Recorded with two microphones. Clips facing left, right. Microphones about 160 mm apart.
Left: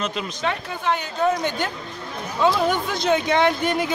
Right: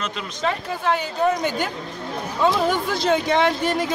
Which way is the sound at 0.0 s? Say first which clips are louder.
Even; centre (ahead or behind).